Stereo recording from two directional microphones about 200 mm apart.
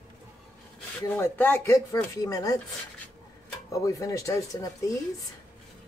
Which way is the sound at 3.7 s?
15° left (ahead or behind).